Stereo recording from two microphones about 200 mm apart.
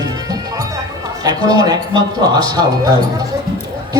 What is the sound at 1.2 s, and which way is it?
Speech, 20° right (ahead or behind).